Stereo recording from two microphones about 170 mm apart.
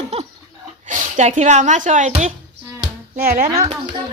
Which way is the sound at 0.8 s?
45° right (ahead or behind).